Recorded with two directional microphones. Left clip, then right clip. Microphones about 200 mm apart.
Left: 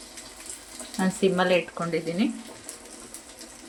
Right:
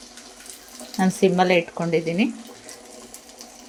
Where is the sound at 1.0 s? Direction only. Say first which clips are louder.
Right 5 dB; 30° right (ahead or behind).